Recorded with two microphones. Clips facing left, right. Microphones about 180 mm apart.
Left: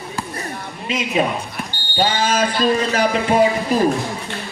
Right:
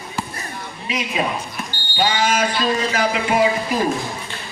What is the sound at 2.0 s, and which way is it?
Speech, 30° left (ahead or behind).